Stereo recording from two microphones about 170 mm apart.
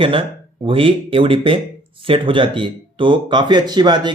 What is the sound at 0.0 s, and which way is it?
Speech, 30° right (ahead or behind).